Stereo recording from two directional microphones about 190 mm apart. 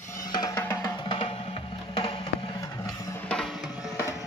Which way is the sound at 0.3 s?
20° left (ahead or behind).